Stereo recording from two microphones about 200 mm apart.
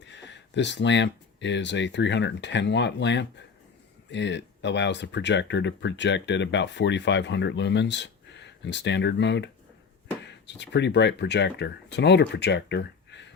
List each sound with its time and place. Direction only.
0.1 s speech: 60° left (ahead or behind)